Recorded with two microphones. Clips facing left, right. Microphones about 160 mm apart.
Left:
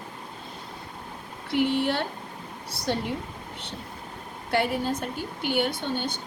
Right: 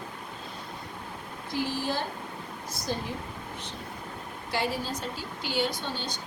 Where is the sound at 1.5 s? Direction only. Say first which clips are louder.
Left 6 dB; 65° left (ahead or behind).